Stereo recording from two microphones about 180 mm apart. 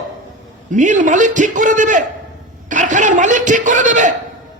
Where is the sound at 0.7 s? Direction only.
45° right (ahead or behind).